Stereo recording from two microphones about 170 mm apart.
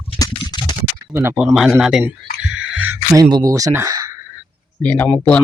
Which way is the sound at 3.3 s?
20° right (ahead or behind).